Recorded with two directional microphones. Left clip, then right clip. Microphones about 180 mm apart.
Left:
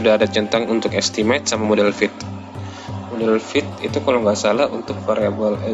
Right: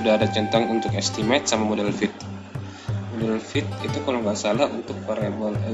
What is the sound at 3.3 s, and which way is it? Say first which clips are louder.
Speech: left 8 dB; 35° left (ahead or behind).